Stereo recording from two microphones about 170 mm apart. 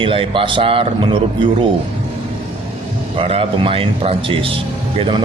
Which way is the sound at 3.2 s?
35° right (ahead or behind).